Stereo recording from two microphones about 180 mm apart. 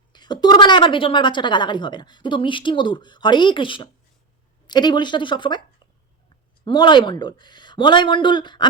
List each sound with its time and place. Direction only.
0.1 s a woman's voice: 25° left (ahead or behind)
6.7 s a woman's voice: 25° left (ahead or behind)